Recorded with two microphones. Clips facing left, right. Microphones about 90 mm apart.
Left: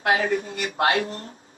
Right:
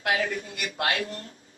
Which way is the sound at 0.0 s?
35° left (ahead or behind).